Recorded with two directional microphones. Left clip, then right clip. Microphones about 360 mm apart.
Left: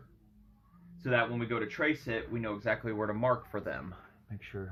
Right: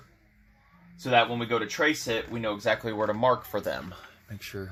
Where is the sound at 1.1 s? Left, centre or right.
Right.